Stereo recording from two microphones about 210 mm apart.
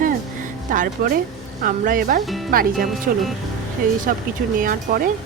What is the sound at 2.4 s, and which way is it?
Speech, 45° right (ahead or behind).